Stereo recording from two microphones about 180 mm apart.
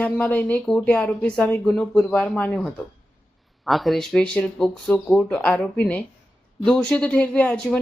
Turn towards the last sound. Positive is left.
turn(degrees=5)  # may be behind; listen again after turning